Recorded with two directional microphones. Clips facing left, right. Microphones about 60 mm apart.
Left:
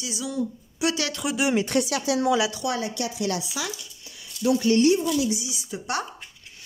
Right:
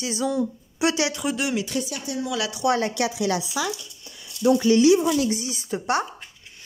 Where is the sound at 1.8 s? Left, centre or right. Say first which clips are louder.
Left 6 dB; left.